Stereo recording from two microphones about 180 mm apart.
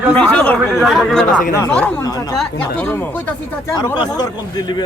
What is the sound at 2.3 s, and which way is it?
Speech, 5° left (ahead or behind).